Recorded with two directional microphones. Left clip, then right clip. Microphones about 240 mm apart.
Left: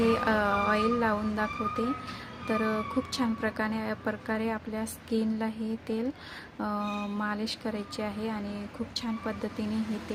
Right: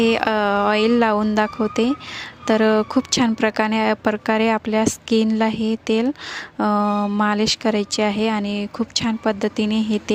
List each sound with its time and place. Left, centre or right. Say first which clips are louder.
0.0 s speech: right 8 dB; right